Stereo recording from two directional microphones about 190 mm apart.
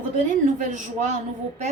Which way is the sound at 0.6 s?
40° right (ahead or behind).